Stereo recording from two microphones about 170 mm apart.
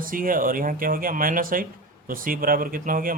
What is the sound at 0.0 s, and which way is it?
Speech, 55° right (ahead or behind).